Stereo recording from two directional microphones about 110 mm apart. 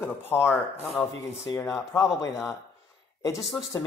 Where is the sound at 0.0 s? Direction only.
20° left (ahead or behind).